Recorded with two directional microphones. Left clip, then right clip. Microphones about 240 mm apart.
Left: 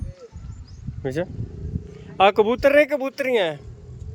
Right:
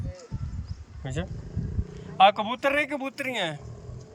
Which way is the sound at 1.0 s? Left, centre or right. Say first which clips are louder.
Left 10 dB; centre.